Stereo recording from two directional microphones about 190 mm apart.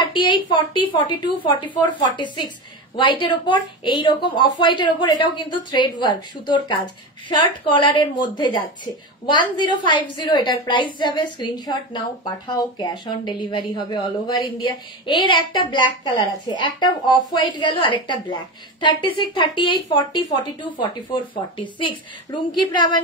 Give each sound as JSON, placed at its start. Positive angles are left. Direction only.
{"t": 0.0, "sound": "a woman's voice", "side_deg": 25}